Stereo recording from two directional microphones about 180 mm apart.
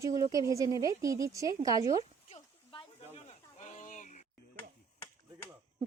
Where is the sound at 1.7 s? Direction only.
30° left (ahead or behind).